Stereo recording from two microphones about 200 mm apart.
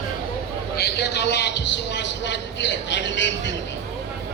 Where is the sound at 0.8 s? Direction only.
55° left (ahead or behind).